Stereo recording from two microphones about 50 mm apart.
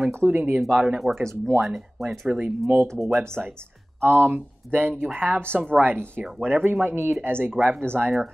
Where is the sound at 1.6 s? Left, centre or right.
Centre.